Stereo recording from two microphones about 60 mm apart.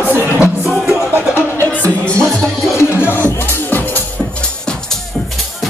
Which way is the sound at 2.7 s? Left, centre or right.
Left.